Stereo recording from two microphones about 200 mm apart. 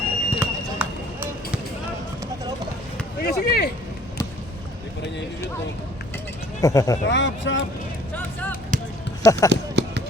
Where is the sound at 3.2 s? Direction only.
50° left (ahead or behind).